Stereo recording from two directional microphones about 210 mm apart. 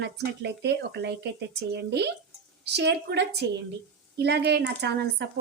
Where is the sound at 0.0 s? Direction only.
50° right (ahead or behind).